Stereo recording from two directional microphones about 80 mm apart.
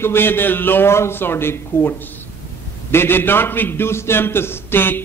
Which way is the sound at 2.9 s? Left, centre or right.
Left.